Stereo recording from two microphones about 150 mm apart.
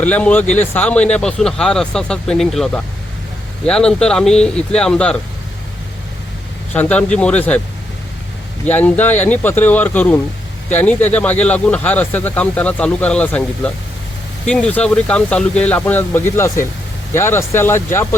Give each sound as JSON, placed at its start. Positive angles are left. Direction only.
{"t": 0.0, "sound": "speech", "side_deg": 10}
{"t": 6.7, "sound": "speech", "side_deg": 10}
{"t": 8.6, "sound": "speech", "side_deg": 10}